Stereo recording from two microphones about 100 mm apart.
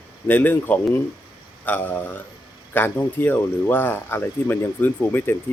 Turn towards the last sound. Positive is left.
turn(degrees=20)  # may be behind; listen again after turning